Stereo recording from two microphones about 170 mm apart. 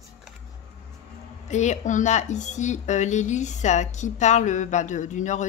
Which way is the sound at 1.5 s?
45° left (ahead or behind).